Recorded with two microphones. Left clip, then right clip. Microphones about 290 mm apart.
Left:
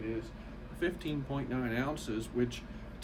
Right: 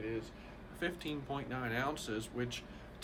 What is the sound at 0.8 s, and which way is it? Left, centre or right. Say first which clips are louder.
Speech: left 4 dB; centre.